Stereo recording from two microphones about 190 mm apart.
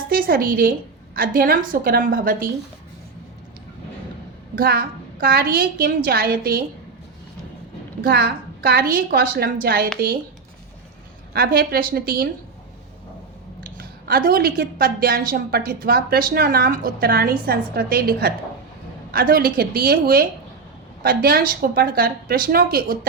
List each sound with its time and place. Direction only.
0.1 s a woman's voice: 50° right (ahead or behind)
4.5 s a woman's voice: 50° right (ahead or behind)
8.0 s a woman's voice: 50° right (ahead or behind)
11.3 s a woman's voice: 50° right (ahead or behind)
13.6 s a woman's voice: 50° right (ahead or behind)